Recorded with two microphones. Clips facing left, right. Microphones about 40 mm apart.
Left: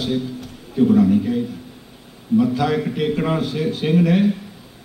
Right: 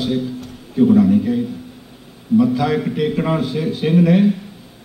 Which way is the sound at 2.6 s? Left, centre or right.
Centre.